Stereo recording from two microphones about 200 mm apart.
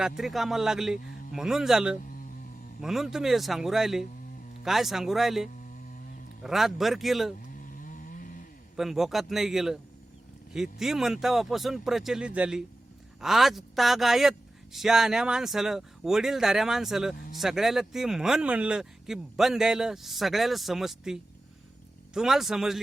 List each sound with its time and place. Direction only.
0.0 s speech: centre (ahead or behind)
7.5 s chainsaw: 45° left (ahead or behind)
8.7 s speech: centre (ahead or behind)